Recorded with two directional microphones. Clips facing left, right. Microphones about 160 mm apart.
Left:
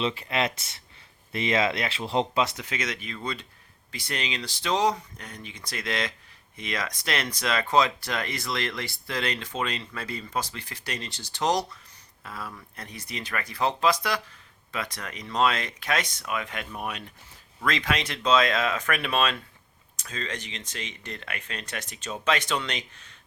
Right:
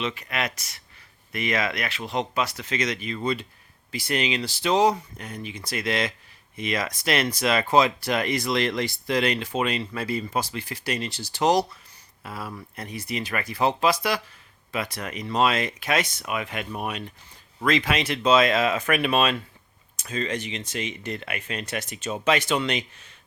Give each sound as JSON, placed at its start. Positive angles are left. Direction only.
{"t": 0.0, "sound": "speech", "side_deg": 30}
{"t": 2.6, "sound": "speech", "side_deg": 5}